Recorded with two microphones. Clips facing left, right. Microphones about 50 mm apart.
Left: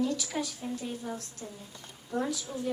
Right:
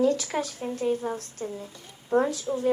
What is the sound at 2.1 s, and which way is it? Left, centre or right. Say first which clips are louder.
Speech: right 9 dB; right.